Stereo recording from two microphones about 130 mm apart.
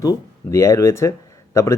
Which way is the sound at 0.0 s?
25° left (ahead or behind).